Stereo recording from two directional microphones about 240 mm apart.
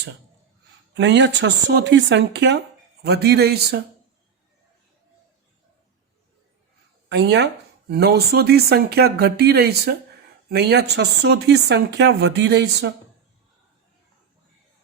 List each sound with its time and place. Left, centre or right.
0.9 s speech: right
7.1 s speech: right